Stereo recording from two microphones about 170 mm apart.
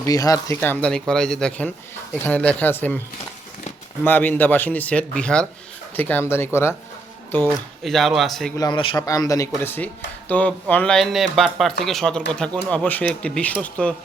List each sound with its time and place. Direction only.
0.0 s speech: 20° left (ahead or behind)
4.0 s speech: 10° left (ahead or behind)
7.9 s speech: centre (ahead or behind)
8.5 s a man's voice: 25° left (ahead or behind); by 13.9 s 5° left (ahead or behind)